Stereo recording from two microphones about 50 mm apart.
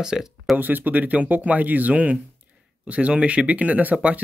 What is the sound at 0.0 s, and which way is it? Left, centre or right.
Speech, centre.